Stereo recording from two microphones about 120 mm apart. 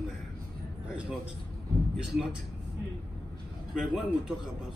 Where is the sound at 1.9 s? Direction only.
5° right (ahead or behind).